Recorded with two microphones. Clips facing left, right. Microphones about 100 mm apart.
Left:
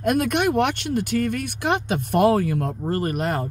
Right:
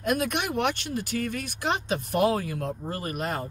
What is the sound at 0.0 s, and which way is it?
Speech, 55° left (ahead or behind).